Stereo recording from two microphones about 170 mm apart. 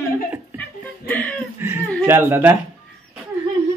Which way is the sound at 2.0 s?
15° right (ahead or behind).